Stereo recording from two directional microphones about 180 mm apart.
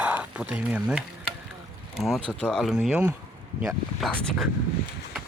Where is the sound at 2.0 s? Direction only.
5° left (ahead or behind).